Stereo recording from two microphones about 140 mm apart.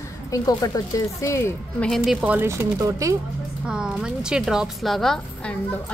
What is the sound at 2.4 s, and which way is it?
Speech, 20° right (ahead or behind).